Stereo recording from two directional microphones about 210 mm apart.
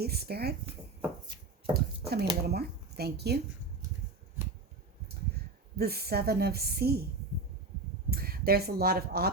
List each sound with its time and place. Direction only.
0.0 s a woman's voice: 50° right (ahead or behind)
1.7 s a sound: 50° right (ahead or behind)
2.4 s speech: 50° right (ahead or behind)
5.7 s a woman's voice: 50° right (ahead or behind)
8.1 s speech: 45° right (ahead or behind)